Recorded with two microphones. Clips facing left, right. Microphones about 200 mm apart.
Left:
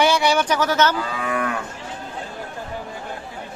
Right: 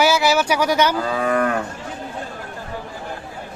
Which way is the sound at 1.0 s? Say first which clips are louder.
Right 5 dB; 40° right (ahead or behind).